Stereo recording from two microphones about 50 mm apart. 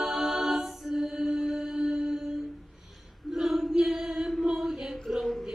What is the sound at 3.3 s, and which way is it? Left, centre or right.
Choir, centre.